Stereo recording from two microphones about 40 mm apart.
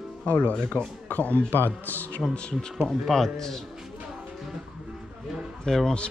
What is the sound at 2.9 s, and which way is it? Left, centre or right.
Speech, centre.